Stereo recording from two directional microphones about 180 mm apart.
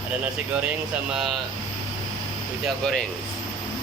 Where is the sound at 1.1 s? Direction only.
Centre (ahead or behind).